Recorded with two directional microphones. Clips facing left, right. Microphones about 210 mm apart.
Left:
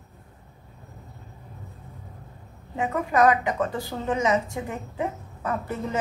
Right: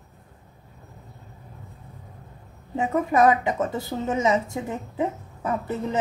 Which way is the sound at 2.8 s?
25° right (ahead or behind).